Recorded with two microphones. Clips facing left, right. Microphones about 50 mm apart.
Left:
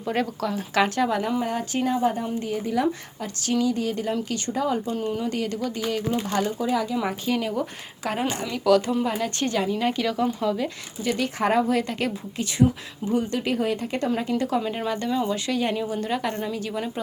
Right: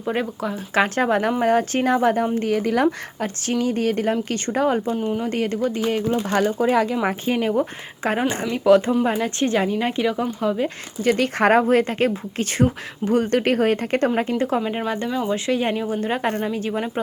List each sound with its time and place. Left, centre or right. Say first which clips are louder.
0.0 s speech: right 2 dB; centre
0.5 s speech: right 3 dB; right
2.8 s speech: right 5 dB; right
4.9 s speech: right 4 dB; centre
5.2 s speech: right 4 dB; right
7.0 s speech: right 4 dB; right
11.0 s speech: right 6 dB; right
14.2 s speech: right 3 dB; right; by 15.4 s centre
15.4 s speech: right 3 dB; right